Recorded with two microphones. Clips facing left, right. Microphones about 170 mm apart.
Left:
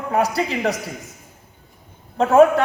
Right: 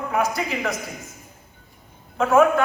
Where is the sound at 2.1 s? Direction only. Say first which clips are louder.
Left 4 dB; 35° left (ahead or behind).